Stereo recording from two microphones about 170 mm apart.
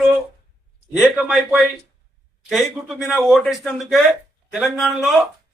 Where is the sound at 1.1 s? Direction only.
Centre (ahead or behind).